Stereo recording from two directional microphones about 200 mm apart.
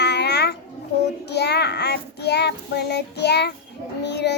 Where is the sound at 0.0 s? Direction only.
55° left (ahead or behind).